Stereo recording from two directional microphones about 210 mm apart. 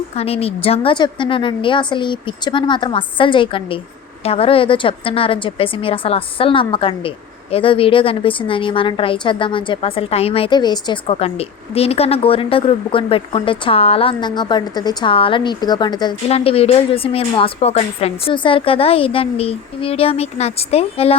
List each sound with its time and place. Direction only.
0.2 s a woman's voice: 30° left (ahead or behind)